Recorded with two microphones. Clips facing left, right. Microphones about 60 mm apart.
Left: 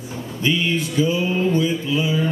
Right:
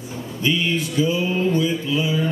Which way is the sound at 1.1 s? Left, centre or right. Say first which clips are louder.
Left 1 dB; left.